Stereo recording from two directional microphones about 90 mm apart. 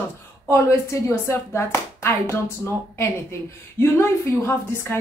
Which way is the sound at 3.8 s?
25° left (ahead or behind).